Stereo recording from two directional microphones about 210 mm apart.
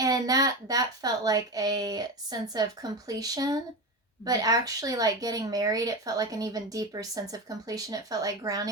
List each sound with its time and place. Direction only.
0.0 s speech: 15° right (ahead or behind)